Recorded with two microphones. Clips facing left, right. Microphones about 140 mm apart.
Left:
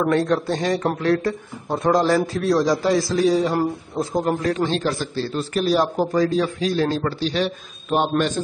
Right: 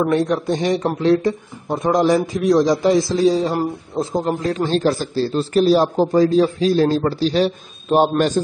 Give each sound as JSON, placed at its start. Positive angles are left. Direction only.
{"t": 0.1, "sound": "a man's voice", "side_deg": -20}